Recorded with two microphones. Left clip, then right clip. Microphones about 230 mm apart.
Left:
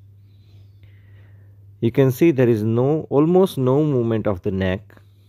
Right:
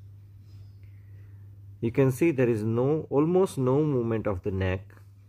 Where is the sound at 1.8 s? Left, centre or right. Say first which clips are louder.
Left 7 dB; centre.